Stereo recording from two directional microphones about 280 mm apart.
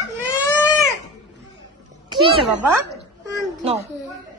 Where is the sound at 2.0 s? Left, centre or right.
Centre.